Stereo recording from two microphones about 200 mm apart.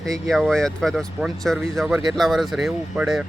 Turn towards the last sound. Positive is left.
turn(degrees=0)  # may be behind; listen again after turning